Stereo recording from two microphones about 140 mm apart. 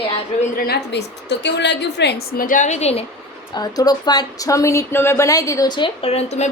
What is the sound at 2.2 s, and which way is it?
Speech, 90° left.